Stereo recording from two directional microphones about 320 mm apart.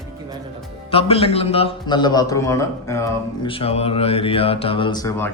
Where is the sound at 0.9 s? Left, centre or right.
Centre.